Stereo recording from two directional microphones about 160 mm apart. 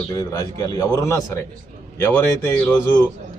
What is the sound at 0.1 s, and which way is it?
Speech, 25° left (ahead or behind).